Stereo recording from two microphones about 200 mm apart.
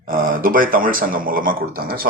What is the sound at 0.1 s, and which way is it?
Speech, 45° right (ahead or behind).